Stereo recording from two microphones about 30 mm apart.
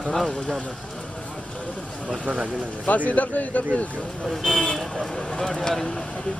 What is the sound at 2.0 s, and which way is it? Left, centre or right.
Speech, right.